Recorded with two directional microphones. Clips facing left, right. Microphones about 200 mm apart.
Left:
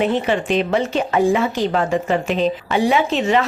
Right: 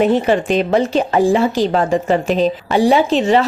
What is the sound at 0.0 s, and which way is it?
Speech, 40° right (ahead or behind).